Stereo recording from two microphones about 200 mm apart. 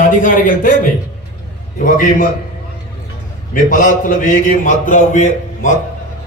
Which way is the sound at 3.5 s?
45° left (ahead or behind).